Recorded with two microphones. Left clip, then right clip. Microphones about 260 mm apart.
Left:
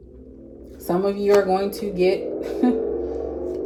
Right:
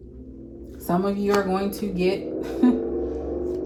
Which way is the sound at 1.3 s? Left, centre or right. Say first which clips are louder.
Left 7 dB; centre.